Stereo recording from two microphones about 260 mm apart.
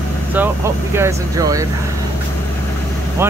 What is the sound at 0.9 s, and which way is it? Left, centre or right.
Speech, centre.